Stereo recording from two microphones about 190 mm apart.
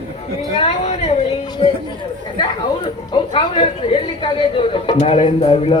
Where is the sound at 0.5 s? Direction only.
35° left (ahead or behind).